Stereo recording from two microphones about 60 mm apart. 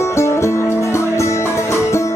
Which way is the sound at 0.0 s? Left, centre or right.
Left.